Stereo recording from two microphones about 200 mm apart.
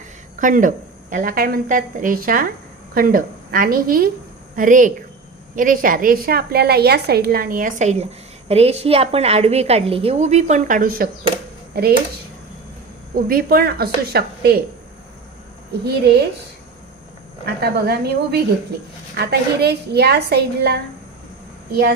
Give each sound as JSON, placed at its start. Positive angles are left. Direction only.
{"t": 0.3, "sound": "a woman's voice", "side_deg": -40}
{"t": 13.1, "sound": "a woman's voice", "side_deg": -45}
{"t": 15.8, "sound": "speech", "side_deg": -55}
{"t": 17.4, "sound": "a woman's voice", "side_deg": -55}